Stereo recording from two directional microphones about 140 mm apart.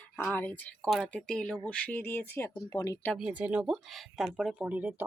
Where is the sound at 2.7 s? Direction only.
30° left (ahead or behind).